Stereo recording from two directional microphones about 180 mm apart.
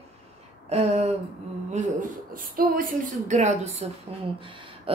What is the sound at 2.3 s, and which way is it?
A woman's voice, 50° right (ahead or behind).